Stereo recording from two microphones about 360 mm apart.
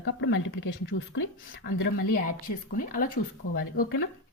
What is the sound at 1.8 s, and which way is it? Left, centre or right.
Speech, left.